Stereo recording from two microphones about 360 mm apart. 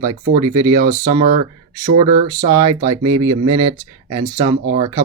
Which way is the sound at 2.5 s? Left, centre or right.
Centre.